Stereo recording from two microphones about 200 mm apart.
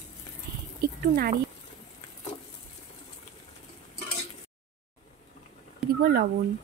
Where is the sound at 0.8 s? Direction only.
50° right (ahead or behind).